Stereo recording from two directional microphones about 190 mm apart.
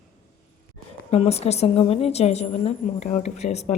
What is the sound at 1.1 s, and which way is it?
A woman's voice, 35° left (ahead or behind).